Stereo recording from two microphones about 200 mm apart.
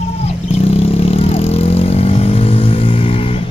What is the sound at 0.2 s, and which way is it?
Vehicle, 30° left (ahead or behind).